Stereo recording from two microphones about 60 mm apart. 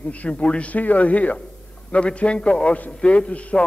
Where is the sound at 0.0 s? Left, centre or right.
Left.